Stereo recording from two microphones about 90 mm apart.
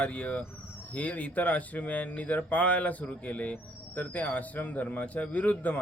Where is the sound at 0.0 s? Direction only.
15° left (ahead or behind).